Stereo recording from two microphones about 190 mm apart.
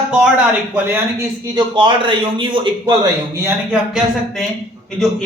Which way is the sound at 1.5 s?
25° right (ahead or behind).